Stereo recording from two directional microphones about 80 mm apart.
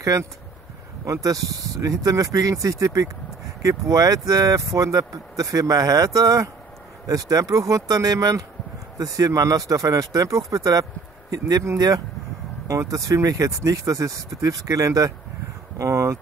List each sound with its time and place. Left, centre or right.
0.0 s speech: right
12.6 s speech: right